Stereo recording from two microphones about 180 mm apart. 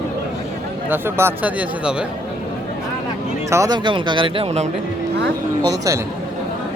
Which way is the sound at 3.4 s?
15° right (ahead or behind).